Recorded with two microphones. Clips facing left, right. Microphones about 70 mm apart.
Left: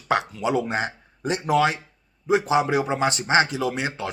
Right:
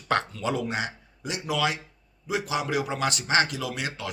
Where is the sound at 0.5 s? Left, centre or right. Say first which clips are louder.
Left 5 dB; left.